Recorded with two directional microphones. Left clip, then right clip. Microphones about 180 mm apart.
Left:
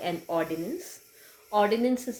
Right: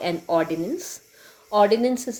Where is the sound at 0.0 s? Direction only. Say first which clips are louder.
Right 7 dB; 45° right (ahead or behind).